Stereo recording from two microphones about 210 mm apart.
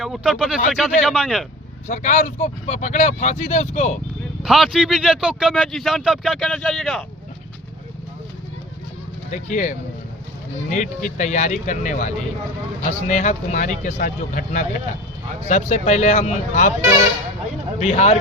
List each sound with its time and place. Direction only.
0.0 s speech: 5° right (ahead or behind)
1.9 s speech: 35° left (ahead or behind)
4.4 s speech: centre (ahead or behind)
9.3 s speech: 35° left (ahead or behind)
17.7 s speech: 30° left (ahead or behind)